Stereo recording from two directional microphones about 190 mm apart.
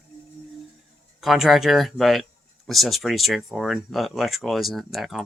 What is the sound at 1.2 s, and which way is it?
Speech, centre (ahead or behind).